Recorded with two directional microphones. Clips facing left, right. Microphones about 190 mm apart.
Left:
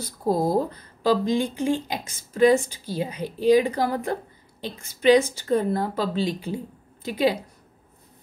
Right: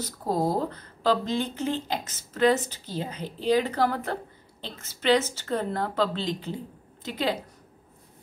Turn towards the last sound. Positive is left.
turn(degrees=10)  # may be behind; listen again after turning